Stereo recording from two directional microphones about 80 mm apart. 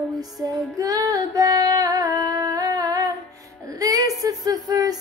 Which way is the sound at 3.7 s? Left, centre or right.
Right.